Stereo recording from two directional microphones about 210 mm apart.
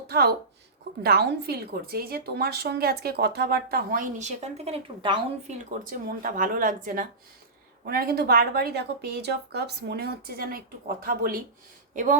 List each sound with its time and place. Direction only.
0.1 s a woman's voice: 50° right (ahead or behind); by 5.5 s 25° right (ahead or behind)
5.8 s a woman's voice: 40° right (ahead or behind)